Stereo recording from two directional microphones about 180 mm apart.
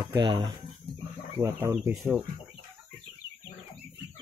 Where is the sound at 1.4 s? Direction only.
15° right (ahead or behind).